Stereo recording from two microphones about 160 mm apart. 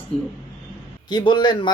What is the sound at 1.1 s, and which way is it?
Speech, 25° left (ahead or behind).